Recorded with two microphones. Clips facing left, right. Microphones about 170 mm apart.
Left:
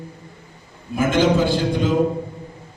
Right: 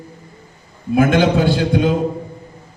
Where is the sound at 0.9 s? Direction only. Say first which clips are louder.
Right 3 dB; 60° right (ahead or behind).